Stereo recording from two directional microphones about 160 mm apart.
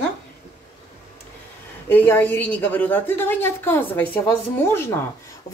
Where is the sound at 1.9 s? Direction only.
10° left (ahead or behind).